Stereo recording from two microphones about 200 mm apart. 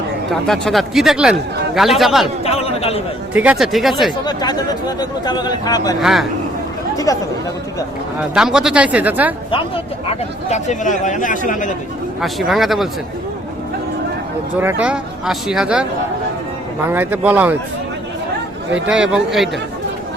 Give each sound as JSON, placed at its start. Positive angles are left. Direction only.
{"t": 0.3, "sound": "speech", "side_deg": 0}
{"t": 2.4, "sound": "speech", "side_deg": 30}
{"t": 3.3, "sound": "speech", "side_deg": -5}
{"t": 4.3, "sound": "speech", "side_deg": 20}
{"t": 6.0, "sound": "speech", "side_deg": 0}
{"t": 6.9, "sound": "speech", "side_deg": 15}
{"t": 8.2, "sound": "speech", "side_deg": -5}
{"t": 9.5, "sound": "speech", "side_deg": 30}
{"t": 12.2, "sound": "speech", "side_deg": 0}
{"t": 14.6, "sound": "speech", "side_deg": -10}
{"t": 16.9, "sound": "a man's voice", "side_deg": -10}
{"t": 18.7, "sound": "speech", "side_deg": -5}